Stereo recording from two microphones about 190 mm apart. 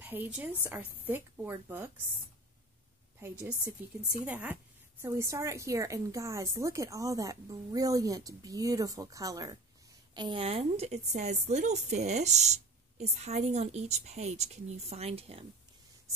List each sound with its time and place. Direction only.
0.0 s a woman's voice: 10° right (ahead or behind)
3.2 s a woman's voice: 10° right (ahead or behind); by 15.4 s 30° right (ahead or behind)